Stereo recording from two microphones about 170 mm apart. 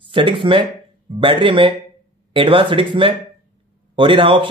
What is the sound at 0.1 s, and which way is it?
Speech, 30° right (ahead or behind).